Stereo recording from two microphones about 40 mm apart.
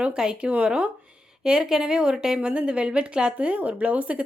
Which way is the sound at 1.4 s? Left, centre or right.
Centre.